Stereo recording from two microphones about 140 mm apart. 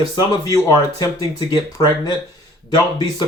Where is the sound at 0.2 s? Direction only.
25° left (ahead or behind).